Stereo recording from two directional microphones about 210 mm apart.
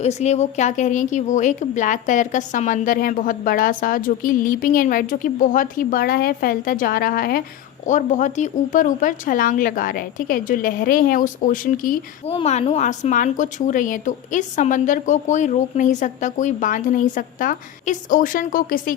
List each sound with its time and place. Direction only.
0.0 s speech: 30° left (ahead or behind)
12.3 s speech: 30° left (ahead or behind)